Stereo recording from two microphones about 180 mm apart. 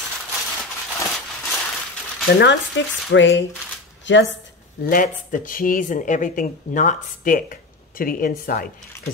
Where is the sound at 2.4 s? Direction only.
80° left.